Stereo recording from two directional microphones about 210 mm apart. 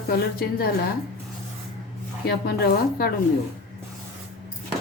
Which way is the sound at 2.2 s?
50° left (ahead or behind).